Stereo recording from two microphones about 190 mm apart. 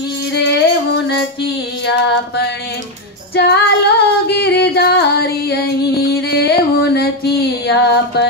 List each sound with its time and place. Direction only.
0.3 s music: 60° left (ahead or behind)
3.3 s female singing: 60° left (ahead or behind)